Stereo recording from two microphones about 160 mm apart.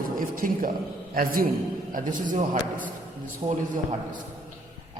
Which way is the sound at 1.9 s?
55° right (ahead or behind).